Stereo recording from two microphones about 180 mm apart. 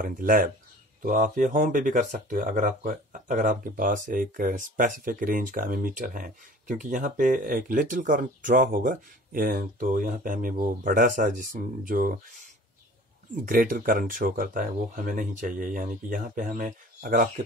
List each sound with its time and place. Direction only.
0.0 s speech: 50° right (ahead or behind)
13.5 s speech: 50° right (ahead or behind)